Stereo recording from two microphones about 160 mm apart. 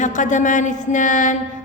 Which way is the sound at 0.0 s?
50° left (ahead or behind).